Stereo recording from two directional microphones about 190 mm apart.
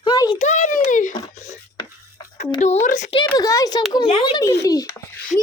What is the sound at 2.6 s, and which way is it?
Speech, 40° left (ahead or behind).